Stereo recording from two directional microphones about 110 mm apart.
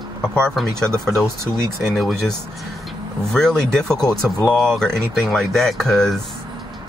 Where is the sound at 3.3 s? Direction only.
5° left (ahead or behind).